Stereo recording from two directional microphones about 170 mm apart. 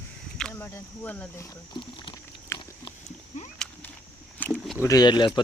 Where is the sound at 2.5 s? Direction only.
15° left (ahead or behind).